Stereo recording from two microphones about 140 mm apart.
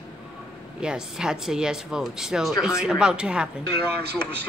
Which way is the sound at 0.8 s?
5° right (ahead or behind).